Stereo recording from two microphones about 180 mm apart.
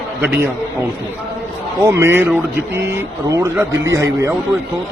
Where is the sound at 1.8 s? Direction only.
15° right (ahead or behind).